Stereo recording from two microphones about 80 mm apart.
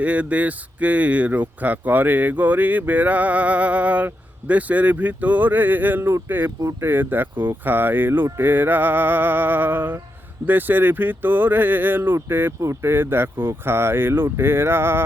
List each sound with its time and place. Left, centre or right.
0.0 s speech: centre